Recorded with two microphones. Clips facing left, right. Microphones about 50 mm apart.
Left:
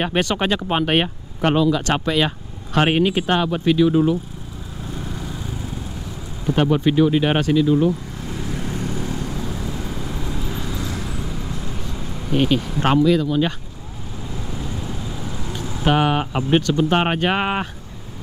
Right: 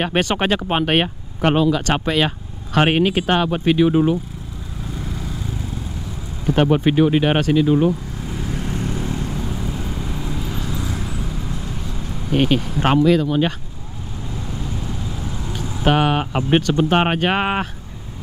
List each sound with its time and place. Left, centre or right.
0.2 s speech: centre
2.0 s speech: centre
4.9 s vehicle: centre
6.4 s speech: centre
7.2 s speech: centre
7.5 s speech: right
8.2 s vehicle: centre
12.3 s speech: centre
12.6 s speech: centre
12.9 s speech: right
14.3 s vehicle: centre
15.8 s speech: centre